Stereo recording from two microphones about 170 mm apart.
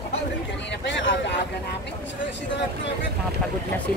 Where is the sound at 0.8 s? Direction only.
90° left.